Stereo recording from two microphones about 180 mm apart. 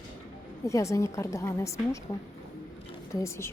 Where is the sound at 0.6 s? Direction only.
15° left (ahead or behind).